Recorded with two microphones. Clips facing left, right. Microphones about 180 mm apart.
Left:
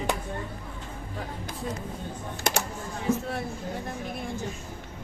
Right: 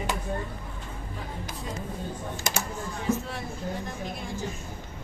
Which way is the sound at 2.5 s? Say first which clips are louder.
Left 4 dB; 65° left (ahead or behind).